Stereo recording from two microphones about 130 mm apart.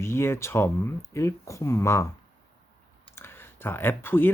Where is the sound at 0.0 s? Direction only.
20° left (ahead or behind).